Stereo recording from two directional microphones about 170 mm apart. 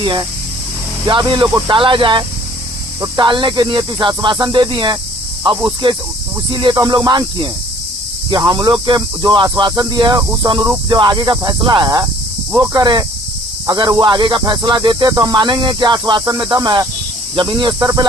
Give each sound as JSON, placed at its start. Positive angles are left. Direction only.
{"t": 0.0, "sound": "speech", "side_deg": -25}